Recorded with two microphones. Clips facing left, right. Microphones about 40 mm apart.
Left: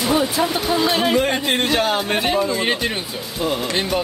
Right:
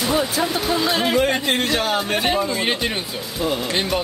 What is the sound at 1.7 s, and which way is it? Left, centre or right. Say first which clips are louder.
Speech: left 2 dB; centre.